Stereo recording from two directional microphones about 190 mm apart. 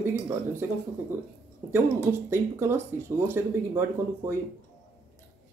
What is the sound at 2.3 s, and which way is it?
Speech, 15° right (ahead or behind).